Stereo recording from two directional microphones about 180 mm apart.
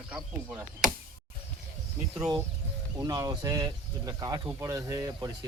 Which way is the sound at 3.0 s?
20° right (ahead or behind).